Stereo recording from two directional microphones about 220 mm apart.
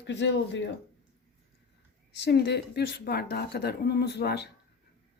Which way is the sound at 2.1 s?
50° left (ahead or behind).